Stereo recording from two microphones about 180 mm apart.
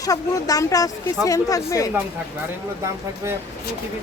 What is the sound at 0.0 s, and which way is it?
Speech, 20° left (ahead or behind).